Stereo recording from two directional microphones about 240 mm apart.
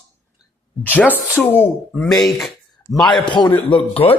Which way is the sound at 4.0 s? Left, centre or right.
Left.